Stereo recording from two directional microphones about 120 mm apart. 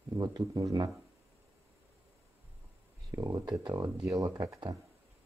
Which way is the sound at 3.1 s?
30° right (ahead or behind).